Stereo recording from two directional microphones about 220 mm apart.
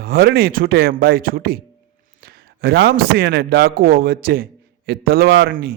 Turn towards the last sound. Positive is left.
turn(degrees=-45)  # may be behind; listen again after turning